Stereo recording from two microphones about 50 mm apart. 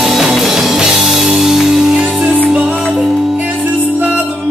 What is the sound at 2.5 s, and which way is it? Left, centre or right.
Music, right.